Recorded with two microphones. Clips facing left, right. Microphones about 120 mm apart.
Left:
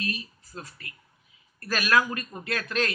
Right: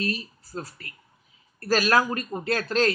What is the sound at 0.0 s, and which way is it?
A man's voice, 35° right (ahead or behind).